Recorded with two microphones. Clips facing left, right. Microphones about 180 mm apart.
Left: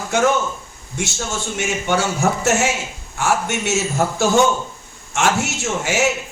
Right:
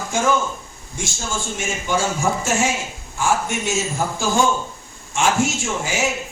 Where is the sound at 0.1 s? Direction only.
70° left (ahead or behind).